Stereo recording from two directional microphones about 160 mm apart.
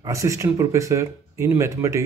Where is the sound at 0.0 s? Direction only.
20° right (ahead or behind).